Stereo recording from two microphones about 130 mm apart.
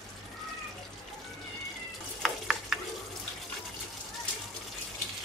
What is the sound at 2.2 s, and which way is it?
Stir, centre (ahead or behind).